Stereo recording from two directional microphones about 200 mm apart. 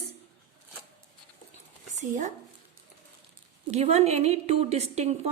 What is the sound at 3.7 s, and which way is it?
A woman's voice, 35° right (ahead or behind).